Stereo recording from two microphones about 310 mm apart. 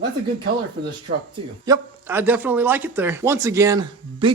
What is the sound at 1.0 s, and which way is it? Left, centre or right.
Speech, centre.